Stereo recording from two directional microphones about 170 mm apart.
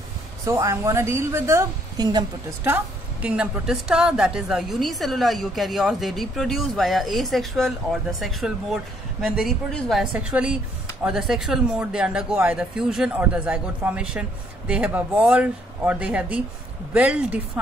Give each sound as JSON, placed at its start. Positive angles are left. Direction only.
{"t": 0.5, "sound": "a woman's voice", "side_deg": -15}